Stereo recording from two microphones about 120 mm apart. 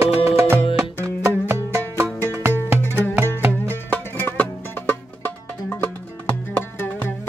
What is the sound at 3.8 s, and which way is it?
Music, 15° left (ahead or behind).